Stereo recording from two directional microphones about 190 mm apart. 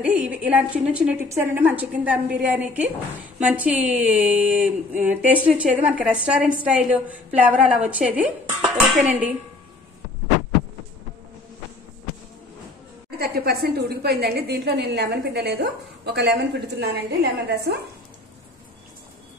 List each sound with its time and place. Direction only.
0.0 s a woman's voice: 5° right (ahead or behind)
8.5 s speech: 35° right (ahead or behind)
13.2 s a woman's voice: 55° right (ahead or behind)